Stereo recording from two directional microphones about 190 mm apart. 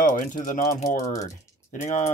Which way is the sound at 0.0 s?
45° left (ahead or behind).